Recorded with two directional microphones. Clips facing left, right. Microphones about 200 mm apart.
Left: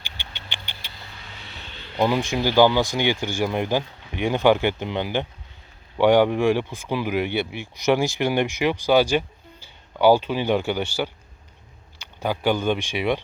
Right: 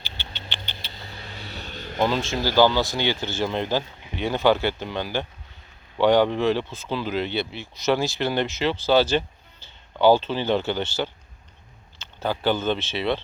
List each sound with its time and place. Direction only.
0.0 s vehicle: 15° left (ahead or behind)
1.2 s music: 40° right (ahead or behind)
2.0 s speech: 15° left (ahead or behind)